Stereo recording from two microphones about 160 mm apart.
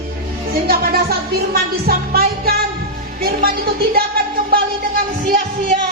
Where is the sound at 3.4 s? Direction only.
70° right (ahead or behind).